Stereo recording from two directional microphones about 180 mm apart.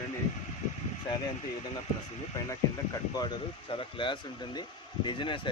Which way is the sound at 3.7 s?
30° left (ahead or behind).